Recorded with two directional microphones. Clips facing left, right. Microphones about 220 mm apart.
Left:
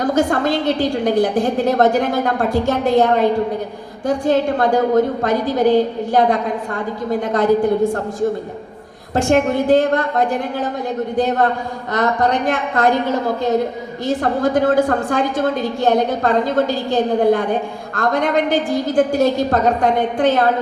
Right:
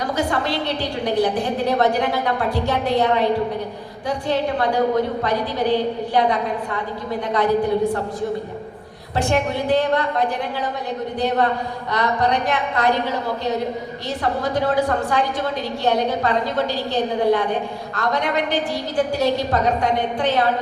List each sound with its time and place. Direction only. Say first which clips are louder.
0.0 s a woman's voice: left 6 dB; 50° left (ahead or behind)
9.1 s a woman's voice: left 5 dB; 50° left (ahead or behind)